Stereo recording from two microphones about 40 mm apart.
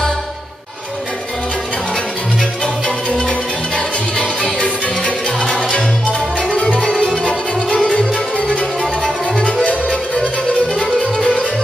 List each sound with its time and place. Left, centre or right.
3.2 s music: left